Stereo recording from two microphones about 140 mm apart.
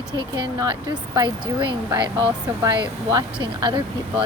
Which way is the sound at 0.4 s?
30° right (ahead or behind).